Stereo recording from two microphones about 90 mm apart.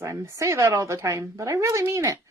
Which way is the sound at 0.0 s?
35° right (ahead or behind).